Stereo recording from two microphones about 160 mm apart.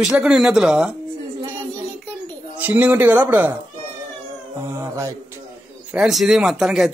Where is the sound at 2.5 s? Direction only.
10° right (ahead or behind).